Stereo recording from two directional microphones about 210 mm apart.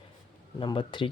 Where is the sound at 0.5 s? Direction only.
25° left (ahead or behind).